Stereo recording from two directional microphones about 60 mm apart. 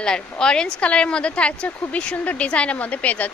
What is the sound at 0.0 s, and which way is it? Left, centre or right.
Speech, centre.